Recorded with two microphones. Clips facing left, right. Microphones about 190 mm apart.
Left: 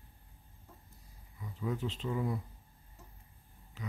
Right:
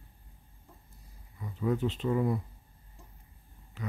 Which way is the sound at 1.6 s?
60° right (ahead or behind).